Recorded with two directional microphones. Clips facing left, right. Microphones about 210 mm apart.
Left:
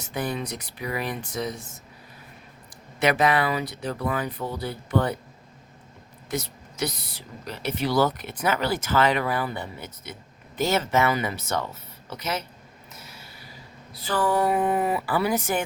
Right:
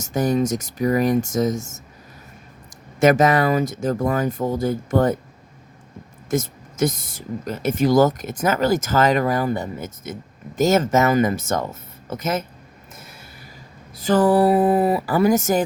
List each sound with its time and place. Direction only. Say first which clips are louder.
0.0 s speech: right 10 dB; 45° right (ahead or behind)
3.0 s speech: right 6 dB; 45° right (ahead or behind)
6.3 s speech: right 8 dB; 50° right (ahead or behind)
12.9 s a sound: right 3 dB; 50° right (ahead or behind)
13.9 s speech: right 8 dB; 45° right (ahead or behind)